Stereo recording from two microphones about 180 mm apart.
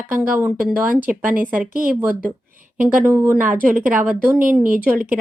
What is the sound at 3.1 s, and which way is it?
Speech, 10° right (ahead or behind).